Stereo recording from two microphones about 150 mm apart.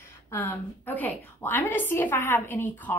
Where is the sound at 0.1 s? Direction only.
15° left (ahead or behind).